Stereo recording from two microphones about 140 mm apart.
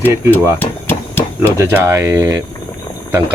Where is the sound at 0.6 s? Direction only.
15° left (ahead or behind).